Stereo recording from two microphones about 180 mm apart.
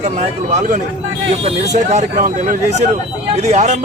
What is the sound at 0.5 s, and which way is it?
Speech, 45° right (ahead or behind).